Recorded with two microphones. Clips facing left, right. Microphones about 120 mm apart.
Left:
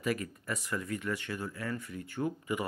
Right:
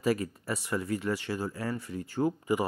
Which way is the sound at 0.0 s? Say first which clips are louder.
Right 5 dB; 30° right (ahead or behind).